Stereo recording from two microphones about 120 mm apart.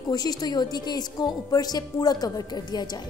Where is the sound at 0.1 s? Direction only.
35° left (ahead or behind).